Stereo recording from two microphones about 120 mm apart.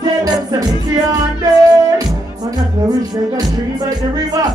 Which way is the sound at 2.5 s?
35° right (ahead or behind).